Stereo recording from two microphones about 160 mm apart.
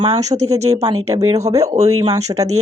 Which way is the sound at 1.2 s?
20° right (ahead or behind).